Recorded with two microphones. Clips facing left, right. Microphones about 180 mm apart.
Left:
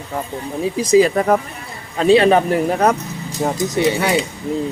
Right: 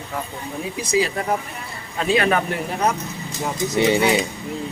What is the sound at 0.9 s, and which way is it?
Speech, 45° left (ahead or behind).